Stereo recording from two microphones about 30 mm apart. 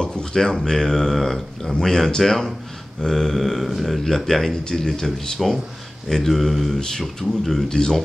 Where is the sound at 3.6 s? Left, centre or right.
Centre.